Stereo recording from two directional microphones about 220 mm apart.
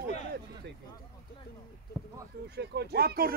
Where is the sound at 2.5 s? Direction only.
50° right (ahead or behind).